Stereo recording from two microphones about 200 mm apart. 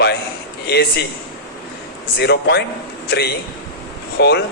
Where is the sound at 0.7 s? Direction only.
55° left (ahead or behind).